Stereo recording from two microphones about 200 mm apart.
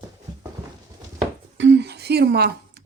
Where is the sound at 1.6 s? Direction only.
60° right (ahead or behind).